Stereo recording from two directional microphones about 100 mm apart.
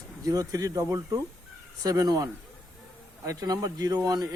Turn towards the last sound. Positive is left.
turn(degrees=-40)  # may be behind; listen again after turning